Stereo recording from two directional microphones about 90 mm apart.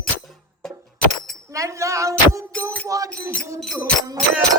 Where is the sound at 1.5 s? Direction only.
35° right (ahead or behind).